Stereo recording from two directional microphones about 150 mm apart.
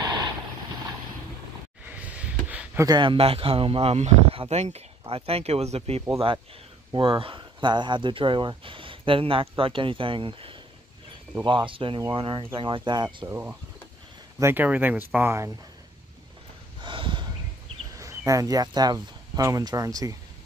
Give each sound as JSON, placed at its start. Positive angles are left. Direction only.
{"t": 1.9, "sound": "a sound", "side_deg": -10}
{"t": 2.8, "sound": "speech", "side_deg": -30}
{"t": 13.3, "sound": "speech", "side_deg": -15}
{"t": 16.8, "sound": "snort", "side_deg": -35}
{"t": 17.9, "sound": "speech", "side_deg": -20}